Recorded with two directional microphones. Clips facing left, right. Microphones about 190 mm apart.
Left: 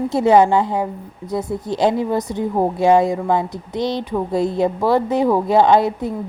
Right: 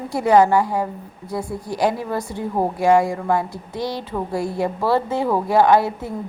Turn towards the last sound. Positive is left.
turn(degrees=20)  # may be behind; listen again after turning